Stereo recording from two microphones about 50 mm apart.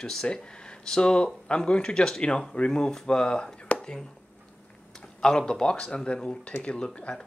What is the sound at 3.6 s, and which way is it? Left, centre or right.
Whispering, centre.